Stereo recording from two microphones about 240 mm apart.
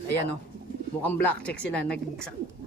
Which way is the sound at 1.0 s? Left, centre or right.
Centre.